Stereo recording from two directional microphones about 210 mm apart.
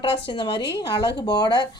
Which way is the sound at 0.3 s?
25° left (ahead or behind).